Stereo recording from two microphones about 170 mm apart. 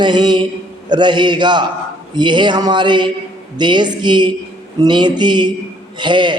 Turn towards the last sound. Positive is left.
turn(degrees=-25)  # may be behind; listen again after turning